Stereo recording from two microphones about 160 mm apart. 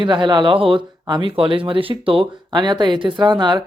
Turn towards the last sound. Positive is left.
turn(degrees=-25)  # may be behind; listen again after turning